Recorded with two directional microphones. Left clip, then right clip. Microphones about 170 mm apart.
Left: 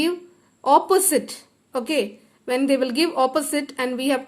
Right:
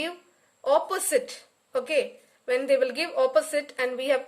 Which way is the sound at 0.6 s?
30° left (ahead or behind).